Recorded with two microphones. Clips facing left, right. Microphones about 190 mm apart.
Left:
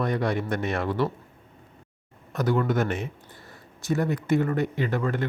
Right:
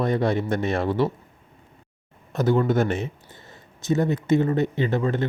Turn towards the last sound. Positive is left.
turn(degrees=-25)  # may be behind; listen again after turning